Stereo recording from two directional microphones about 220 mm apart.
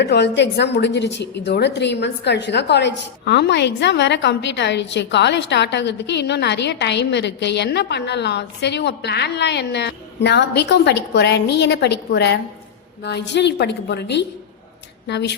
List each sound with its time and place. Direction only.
0.0 s a woman's voice: 50° left (ahead or behind)